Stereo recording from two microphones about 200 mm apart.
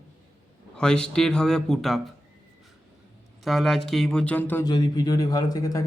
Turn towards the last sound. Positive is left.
turn(degrees=20)  # may be behind; listen again after turning